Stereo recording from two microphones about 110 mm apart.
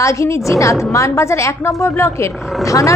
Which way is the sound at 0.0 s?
30° left (ahead or behind).